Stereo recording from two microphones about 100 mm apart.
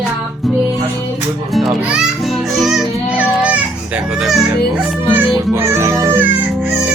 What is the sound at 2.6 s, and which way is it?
Music, 5° right (ahead or behind).